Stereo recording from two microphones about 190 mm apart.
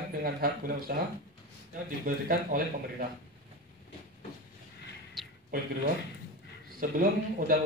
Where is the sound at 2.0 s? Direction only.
45° right (ahead or behind).